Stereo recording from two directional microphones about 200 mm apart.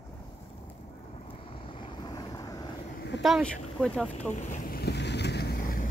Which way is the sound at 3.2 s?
Centre (ahead or behind).